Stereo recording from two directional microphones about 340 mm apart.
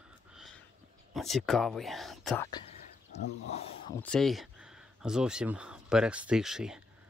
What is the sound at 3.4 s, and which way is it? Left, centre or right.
Speech, centre.